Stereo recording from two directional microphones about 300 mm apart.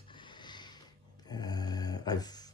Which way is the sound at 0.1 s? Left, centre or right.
Centre.